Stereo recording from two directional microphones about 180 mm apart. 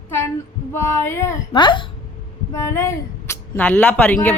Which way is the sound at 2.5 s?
15° left (ahead or behind).